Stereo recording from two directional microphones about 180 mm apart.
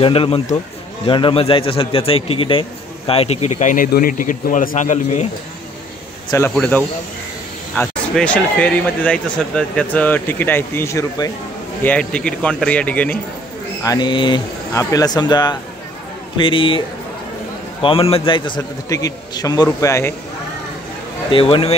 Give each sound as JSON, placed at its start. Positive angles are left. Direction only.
{"t": 0.0, "sound": "a man's voice", "side_deg": 30}
{"t": 6.5, "sound": "speech", "side_deg": 10}
{"t": 11.8, "sound": "speech", "side_deg": 5}
{"t": 13.8, "sound": "a man's voice", "side_deg": 25}
{"t": 17.8, "sound": "a man's voice", "side_deg": 30}
{"t": 21.3, "sound": "a man's voice", "side_deg": 30}